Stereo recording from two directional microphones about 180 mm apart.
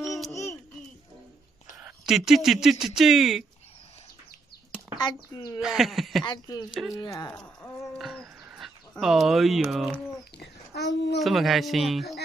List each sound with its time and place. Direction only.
1.8 s speech: 5° right (ahead or behind)
4.9 s speech: 25° left (ahead or behind)
5.6 s speech: centre (ahead or behind)
6.2 s speech: 20° left (ahead or behind)
6.7 s speech: centre (ahead or behind)
7.0 s speech: 20° left (ahead or behind)
7.3 s speech: 5° left (ahead or behind)
10.4 s a child's voice: 65° left (ahead or behind)
11.1 s speech: centre (ahead or behind)